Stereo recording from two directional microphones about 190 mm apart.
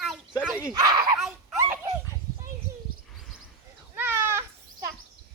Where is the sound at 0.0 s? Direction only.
Centre (ahead or behind).